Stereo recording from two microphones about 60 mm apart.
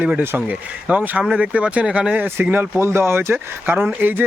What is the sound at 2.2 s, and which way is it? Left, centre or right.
Speech, right.